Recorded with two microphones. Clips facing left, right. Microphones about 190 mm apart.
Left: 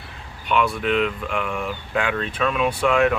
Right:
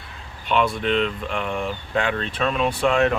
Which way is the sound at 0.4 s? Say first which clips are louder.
Even; 5° left (ahead or behind).